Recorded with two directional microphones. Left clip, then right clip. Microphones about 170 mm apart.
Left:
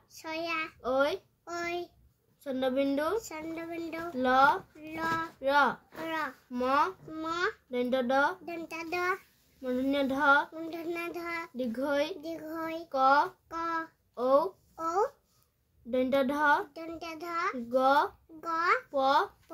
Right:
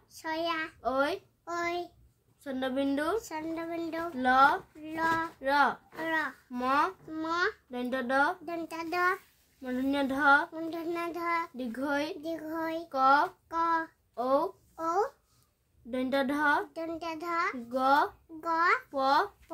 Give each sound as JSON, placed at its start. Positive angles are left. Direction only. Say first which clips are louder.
{"t": 0.1, "sound": "a child's voice", "louder": "right 2 dB", "side_deg": -10}